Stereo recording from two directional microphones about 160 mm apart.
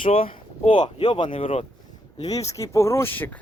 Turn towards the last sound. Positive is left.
turn(degrees=10)  # may be behind; listen again after turning